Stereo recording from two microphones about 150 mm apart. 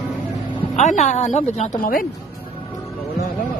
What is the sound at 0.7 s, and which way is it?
A woman's voice, 50° left (ahead or behind).